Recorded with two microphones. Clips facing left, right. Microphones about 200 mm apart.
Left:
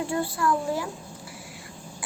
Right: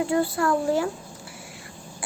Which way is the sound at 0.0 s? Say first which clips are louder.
Right 5 dB; 25° right (ahead or behind).